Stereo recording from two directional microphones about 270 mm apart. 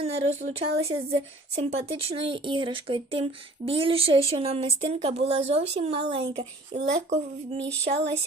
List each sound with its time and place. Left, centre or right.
0.0 s speech: right